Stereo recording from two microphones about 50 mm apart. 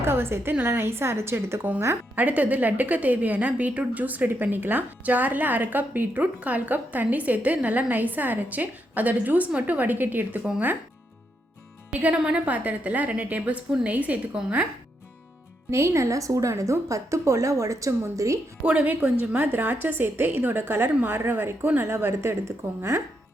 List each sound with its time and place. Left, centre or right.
0.0 s a woman's voice: right
2.1 s a woman's voice: right
11.9 s a woman's voice: right
15.7 s a woman's voice: right
18.6 s a woman's voice: right
19.5 s a woman's voice: right